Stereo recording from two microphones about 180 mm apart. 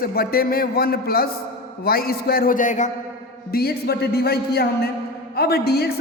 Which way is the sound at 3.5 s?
60° left (ahead or behind).